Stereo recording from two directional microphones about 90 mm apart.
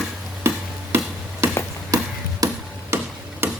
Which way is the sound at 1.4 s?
30° right (ahead or behind).